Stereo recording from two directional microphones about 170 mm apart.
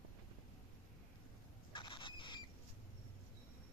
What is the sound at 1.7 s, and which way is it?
Rodents, 30° left (ahead or behind).